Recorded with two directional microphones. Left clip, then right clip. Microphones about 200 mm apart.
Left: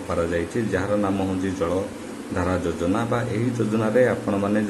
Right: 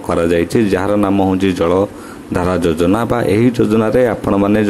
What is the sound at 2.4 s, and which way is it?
A man's voice, 45° right (ahead or behind).